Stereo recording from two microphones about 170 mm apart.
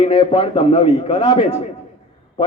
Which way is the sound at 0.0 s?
30° left (ahead or behind).